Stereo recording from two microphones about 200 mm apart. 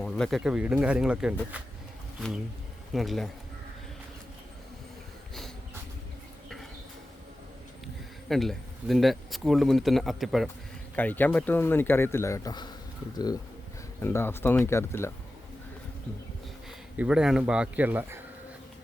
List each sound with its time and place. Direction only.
0.0 s speech: centre (ahead or behind)
2.9 s speech: centre (ahead or behind)
8.3 s speech: centre (ahead or behind); by 12.7 s 20° left (ahead or behind)
14.0 s speech: 10° left (ahead or behind)
17.0 s speech: 5° right (ahead or behind)